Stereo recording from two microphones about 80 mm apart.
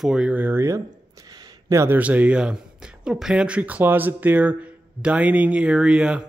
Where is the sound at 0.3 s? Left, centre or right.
Right.